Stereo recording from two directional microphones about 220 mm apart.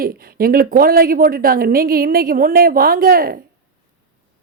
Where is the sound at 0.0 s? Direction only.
40° right (ahead or behind).